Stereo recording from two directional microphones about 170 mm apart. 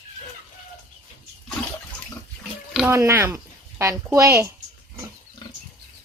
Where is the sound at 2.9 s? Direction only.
15° right (ahead or behind).